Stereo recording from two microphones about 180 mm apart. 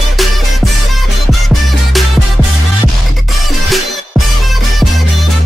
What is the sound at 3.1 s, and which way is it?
Music, centre (ahead or behind).